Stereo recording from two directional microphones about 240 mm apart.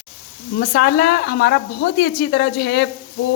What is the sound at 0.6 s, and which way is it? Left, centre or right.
Speech, left.